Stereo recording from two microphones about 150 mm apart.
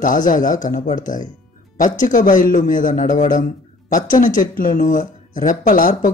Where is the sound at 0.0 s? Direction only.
60° left (ahead or behind).